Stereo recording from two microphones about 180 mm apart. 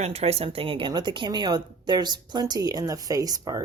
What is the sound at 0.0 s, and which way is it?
A woman's voice, 35° right (ahead or behind).